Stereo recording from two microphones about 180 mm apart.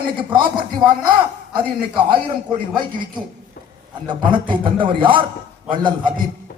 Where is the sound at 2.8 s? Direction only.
25° right (ahead or behind).